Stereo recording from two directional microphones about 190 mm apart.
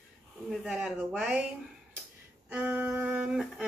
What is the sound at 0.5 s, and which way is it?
Speech, 5° right (ahead or behind).